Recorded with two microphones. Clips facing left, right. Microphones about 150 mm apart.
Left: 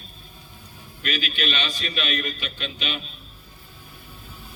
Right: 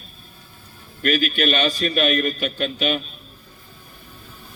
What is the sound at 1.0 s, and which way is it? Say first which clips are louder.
A man's voice: right 8 dB; 45° right (ahead or behind).